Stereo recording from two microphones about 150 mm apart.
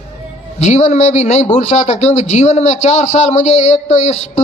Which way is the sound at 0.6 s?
50° left (ahead or behind).